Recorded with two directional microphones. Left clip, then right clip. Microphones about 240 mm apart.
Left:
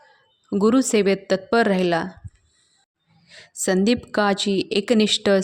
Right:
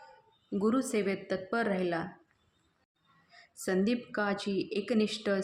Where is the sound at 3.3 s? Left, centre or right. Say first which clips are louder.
Left 10 dB; left.